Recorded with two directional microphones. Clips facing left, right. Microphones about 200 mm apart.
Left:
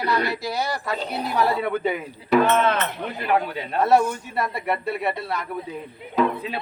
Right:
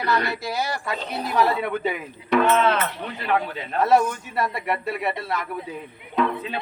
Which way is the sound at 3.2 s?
10° left (ahead or behind).